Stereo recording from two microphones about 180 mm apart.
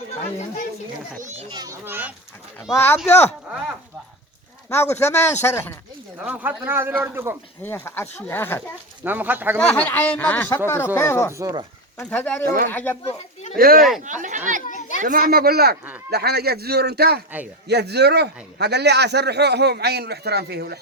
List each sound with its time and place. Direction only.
1.2 s a child's voice: 35° right (ahead or behind)
1.5 s speech: 20° right (ahead or behind)
2.7 s speech: 10° left (ahead or behind)
4.7 s speech: 10° left (ahead or behind)
6.1 s speech: 10° right (ahead or behind)
7.6 s speech: 15° left (ahead or behind)
9.0 s speech: 10° right (ahead or behind)
9.6 s speech: 5° left (ahead or behind)
11.3 s speech: 20° right (ahead or behind)
11.9 s speech: 10° left (ahead or behind)
12.5 s speech: 50° right (ahead or behind)
12.7 s speech: 10° left (ahead or behind)
13.6 s speech: 55° right (ahead or behind)
14.0 s a man's voice: 45° right (ahead or behind); by 20.7 s 60° right (ahead or behind)